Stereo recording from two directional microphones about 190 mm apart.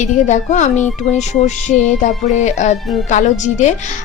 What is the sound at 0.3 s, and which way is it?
Speech, 40° left (ahead or behind).